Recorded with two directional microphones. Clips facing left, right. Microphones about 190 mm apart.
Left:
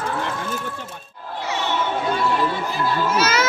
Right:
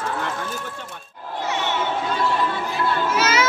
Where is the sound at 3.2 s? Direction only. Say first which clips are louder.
Even; 40° left (ahead or behind).